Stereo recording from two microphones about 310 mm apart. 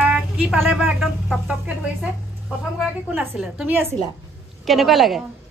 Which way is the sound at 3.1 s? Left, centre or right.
Centre.